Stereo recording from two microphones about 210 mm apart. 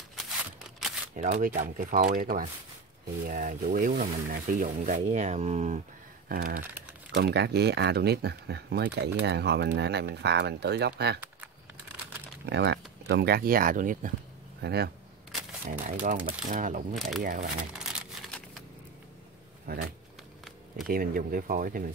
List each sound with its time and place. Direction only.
0.1 s scissors: centre (ahead or behind)
1.1 s speech: 35° right (ahead or behind)
6.2 s speech: 45° right (ahead or behind)
12.4 s speech: 55° right (ahead or behind); by 14.1 s 40° right (ahead or behind)
14.6 s speech: 50° right (ahead or behind)
15.8 s speech: 40° right (ahead or behind)
16.9 s speech: centre (ahead or behind)
17.2 s speech: 40° right (ahead or behind)
19.7 s speech: 45° right (ahead or behind)
20.4 s a sound: centre (ahead or behind)
20.9 s speech: 45° right (ahead or behind)